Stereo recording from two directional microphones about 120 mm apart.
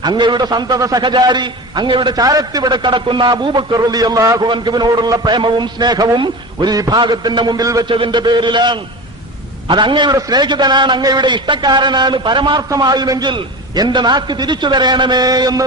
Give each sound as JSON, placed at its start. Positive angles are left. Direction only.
{"t": 0.0, "sound": "a man's voice", "side_deg": -40}
{"t": 4.4, "sound": "a man's voice", "side_deg": -40}
{"t": 7.9, "sound": "a man's voice", "side_deg": -45}